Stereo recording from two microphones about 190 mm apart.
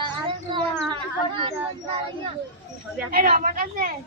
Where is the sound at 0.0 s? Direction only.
25° right (ahead or behind).